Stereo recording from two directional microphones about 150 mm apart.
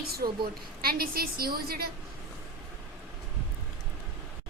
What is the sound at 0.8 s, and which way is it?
A woman's voice, 90° right.